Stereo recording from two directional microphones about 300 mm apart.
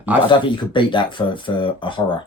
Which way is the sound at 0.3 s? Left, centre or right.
Centre.